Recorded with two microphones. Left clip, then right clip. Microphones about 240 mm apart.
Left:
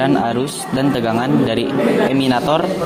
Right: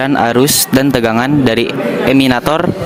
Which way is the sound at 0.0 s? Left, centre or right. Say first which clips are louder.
Right 5 dB; right.